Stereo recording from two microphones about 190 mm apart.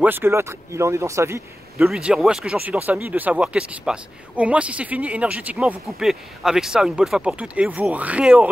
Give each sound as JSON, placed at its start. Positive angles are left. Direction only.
{"t": 0.0, "sound": "speech", "side_deg": -10}
{"t": 1.8, "sound": "speech", "side_deg": -5}